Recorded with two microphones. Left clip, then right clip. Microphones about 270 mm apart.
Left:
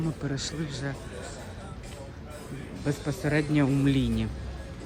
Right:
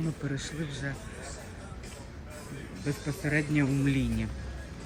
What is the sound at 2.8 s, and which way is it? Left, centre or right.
A man's voice, centre.